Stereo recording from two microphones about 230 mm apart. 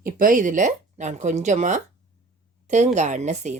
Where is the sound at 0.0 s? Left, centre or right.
Right.